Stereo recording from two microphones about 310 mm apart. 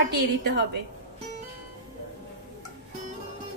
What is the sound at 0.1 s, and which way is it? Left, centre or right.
Speech, right.